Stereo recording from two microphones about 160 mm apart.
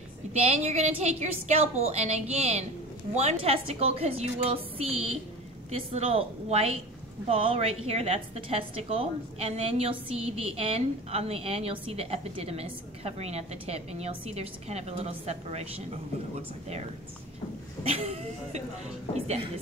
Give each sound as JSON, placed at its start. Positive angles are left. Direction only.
{"t": 0.3, "sound": "a woman's voice", "side_deg": -45}
{"t": 17.8, "sound": "a woman's voice", "side_deg": -40}